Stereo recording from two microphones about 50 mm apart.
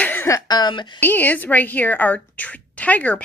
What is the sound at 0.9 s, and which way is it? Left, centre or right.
Speech, left.